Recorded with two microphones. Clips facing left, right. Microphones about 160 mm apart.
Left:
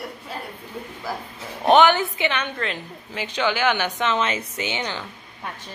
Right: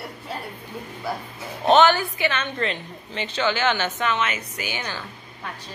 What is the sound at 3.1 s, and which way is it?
Speech, 10° left (ahead or behind).